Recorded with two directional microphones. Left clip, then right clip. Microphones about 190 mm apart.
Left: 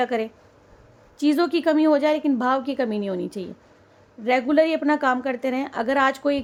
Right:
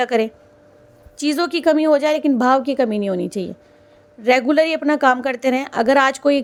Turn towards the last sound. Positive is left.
turn(degrees=-25)  # may be behind; listen again after turning